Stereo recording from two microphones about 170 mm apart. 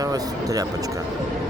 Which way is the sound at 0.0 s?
20° right (ahead or behind).